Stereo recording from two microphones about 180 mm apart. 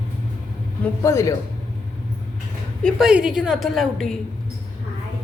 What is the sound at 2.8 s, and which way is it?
A woman's voice, 5° right (ahead or behind).